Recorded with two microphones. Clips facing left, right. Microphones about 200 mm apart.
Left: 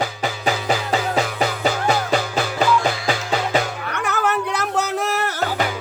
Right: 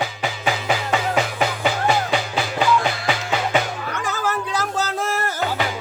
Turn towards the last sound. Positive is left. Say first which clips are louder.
# left 2 dB
turn(degrees=70)  # may be behind; listen again after turning